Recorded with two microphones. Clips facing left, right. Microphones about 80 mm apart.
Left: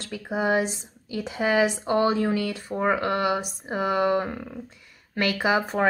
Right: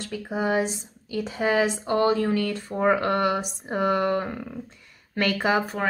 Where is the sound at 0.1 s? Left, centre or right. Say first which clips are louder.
Left 1 dB; centre.